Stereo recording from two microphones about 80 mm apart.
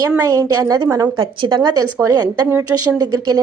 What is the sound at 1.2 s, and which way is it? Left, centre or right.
Speech, right.